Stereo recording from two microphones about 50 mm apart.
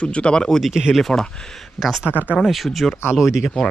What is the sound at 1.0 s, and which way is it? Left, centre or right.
Speech, centre.